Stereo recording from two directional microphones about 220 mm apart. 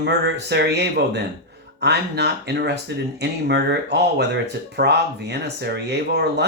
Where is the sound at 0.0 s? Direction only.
50° right (ahead or behind).